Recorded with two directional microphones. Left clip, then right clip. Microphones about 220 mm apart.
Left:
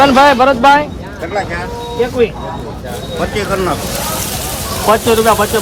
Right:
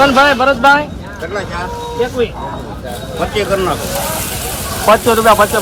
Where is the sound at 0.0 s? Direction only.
30° left (ahead or behind).